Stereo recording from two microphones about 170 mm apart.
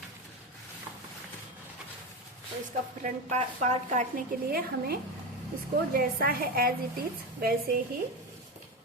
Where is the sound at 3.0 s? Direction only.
45° right (ahead or behind).